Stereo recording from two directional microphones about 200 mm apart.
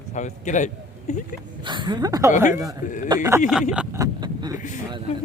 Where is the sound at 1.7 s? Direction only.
20° right (ahead or behind).